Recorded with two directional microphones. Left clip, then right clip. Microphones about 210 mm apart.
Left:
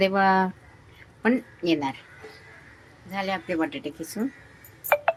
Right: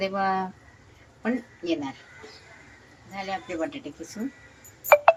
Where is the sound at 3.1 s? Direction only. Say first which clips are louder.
Left 4 dB; 40° left (ahead or behind).